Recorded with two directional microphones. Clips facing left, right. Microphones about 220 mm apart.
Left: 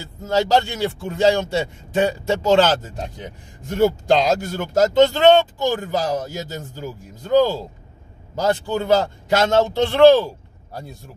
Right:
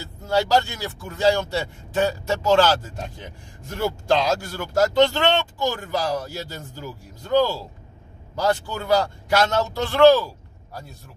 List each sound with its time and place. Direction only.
0.3 s a man's voice: 20° left (ahead or behind)